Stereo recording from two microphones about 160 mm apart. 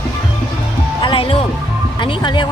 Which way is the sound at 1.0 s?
30° left (ahead or behind).